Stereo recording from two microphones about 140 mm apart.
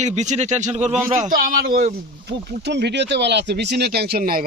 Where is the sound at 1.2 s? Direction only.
80° right.